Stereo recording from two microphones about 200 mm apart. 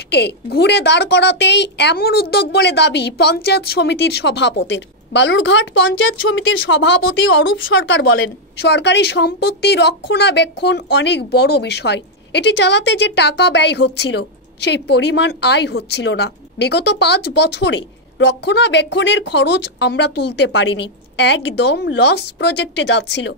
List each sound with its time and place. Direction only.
0.1 s a woman's voice: 55° left (ahead or behind)